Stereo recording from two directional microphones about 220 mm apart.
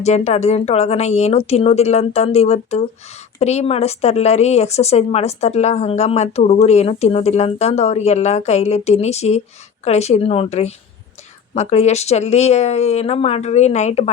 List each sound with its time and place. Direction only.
0.0 s a woman's voice: 30° left (ahead or behind)